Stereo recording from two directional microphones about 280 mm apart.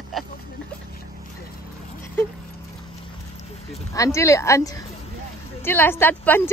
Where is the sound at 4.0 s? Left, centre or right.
Centre.